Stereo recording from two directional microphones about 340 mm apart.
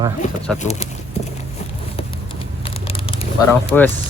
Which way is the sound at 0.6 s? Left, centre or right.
Centre.